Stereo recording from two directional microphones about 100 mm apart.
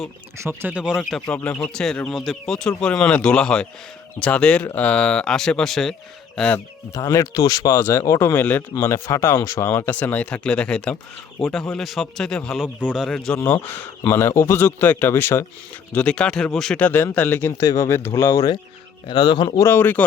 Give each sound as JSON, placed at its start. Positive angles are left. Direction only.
{"t": 0.7, "sound": "speech", "side_deg": -10}
{"t": 1.5, "sound": "speech", "side_deg": 5}
{"t": 6.9, "sound": "speech", "side_deg": 30}
{"t": 9.9, "sound": "a man's voice", "side_deg": 15}
{"t": 13.4, "sound": "speech", "side_deg": 20}
{"t": 15.9, "sound": "speech", "side_deg": 10}
{"t": 16.7, "sound": "speech", "side_deg": 20}
{"t": 19.0, "sound": "a man's voice", "side_deg": 50}
{"t": 19.5, "sound": "speech", "side_deg": 25}